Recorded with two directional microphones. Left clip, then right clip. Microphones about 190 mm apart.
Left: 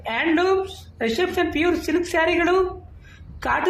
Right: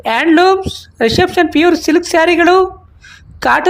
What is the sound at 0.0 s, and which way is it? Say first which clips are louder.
A woman's voice: right 11 dB; 60° right (ahead or behind).